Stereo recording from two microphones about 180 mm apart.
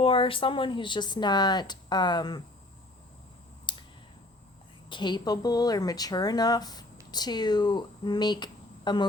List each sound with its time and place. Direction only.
0.0 s speech: 30° left (ahead or behind)
3.7 s a sound: 25° left (ahead or behind)
4.9 s speech: 25° left (ahead or behind)